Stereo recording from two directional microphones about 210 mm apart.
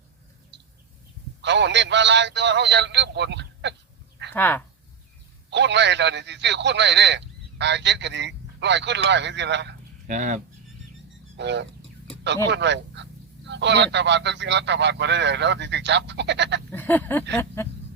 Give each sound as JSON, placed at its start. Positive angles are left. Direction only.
{"t": 0.5, "sound": "bird", "side_deg": -55}
{"t": 1.4, "sound": "a man's voice", "side_deg": -55}
{"t": 4.4, "sound": "a sound", "side_deg": 10}
{"t": 5.5, "sound": "a man's voice", "side_deg": -55}
{"t": 10.1, "sound": "speech", "side_deg": -35}
{"t": 11.3, "sound": "a man's voice", "side_deg": -55}
{"t": 16.7, "sound": "a sound", "side_deg": 10}